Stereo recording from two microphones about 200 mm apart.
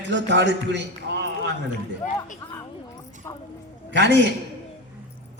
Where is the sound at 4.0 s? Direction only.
60° right (ahead or behind).